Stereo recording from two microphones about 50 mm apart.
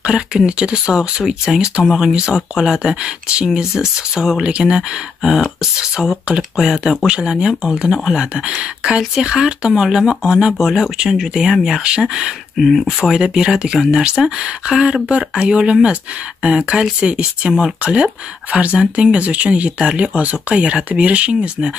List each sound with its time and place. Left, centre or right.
0.0 s speech: centre
12.5 s speech: centre
13.1 s speech: centre